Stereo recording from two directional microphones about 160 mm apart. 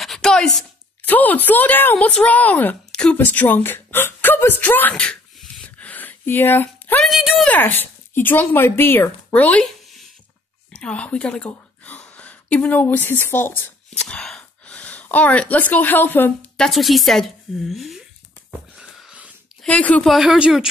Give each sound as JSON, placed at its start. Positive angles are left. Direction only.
{"t": 0.0, "sound": "a sound", "side_deg": 0}
{"t": 1.0, "sound": "a woman's voice", "side_deg": 10}
{"t": 7.1, "sound": "a woman's voice", "side_deg": 0}
{"t": 7.4, "sound": "speech", "side_deg": 10}
{"t": 16.6, "sound": "a woman's voice", "side_deg": 0}
{"t": 18.8, "sound": "a sound", "side_deg": -5}
{"t": 19.6, "sound": "a woman's voice", "side_deg": 10}